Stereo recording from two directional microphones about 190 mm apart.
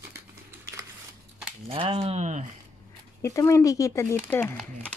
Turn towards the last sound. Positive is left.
turn(degrees=10)  # may be behind; listen again after turning